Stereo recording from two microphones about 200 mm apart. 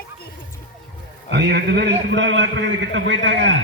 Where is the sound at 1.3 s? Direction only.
55° right (ahead or behind).